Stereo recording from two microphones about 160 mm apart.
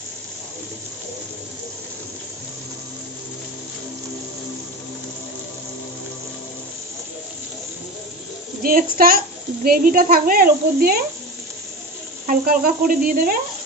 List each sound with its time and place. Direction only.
8.6 s speech: 65° right (ahead or behind)
12.3 s speech: 60° right (ahead or behind)